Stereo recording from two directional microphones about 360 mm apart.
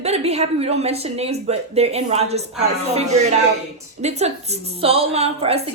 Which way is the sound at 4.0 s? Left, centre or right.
Centre.